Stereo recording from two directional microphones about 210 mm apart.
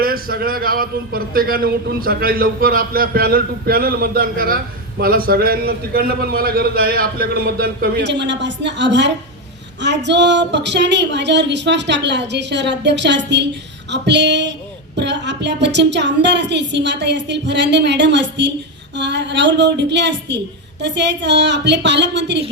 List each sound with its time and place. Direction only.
0.0 s a man's voice: 45° right (ahead or behind)